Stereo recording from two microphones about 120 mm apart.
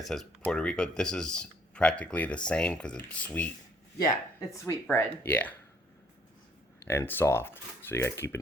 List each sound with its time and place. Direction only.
0.0 s speech: centre (ahead or behind)
4.4 s speech: 20° left (ahead or behind)
6.8 s speech: 20° left (ahead or behind)